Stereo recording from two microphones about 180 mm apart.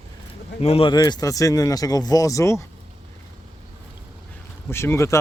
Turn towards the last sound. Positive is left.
turn(degrees=15)  # may be behind; listen again after turning